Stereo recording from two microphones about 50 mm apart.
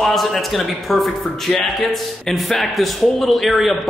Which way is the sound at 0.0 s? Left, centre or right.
Centre.